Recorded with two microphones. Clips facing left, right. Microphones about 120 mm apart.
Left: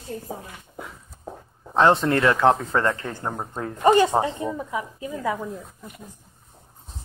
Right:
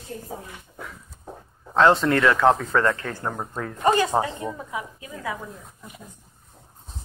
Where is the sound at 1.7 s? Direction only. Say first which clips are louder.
Even; 20° left (ahead or behind).